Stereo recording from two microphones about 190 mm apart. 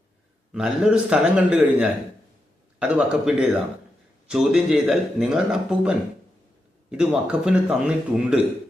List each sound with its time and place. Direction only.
0.5 s a man's voice: 5° right (ahead or behind)